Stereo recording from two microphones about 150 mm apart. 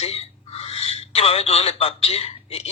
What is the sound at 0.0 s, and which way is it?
A man's voice, 40° left (ahead or behind).